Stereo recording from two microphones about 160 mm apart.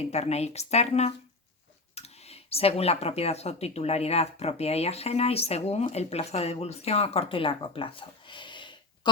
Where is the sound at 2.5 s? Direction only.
40° left (ahead or behind).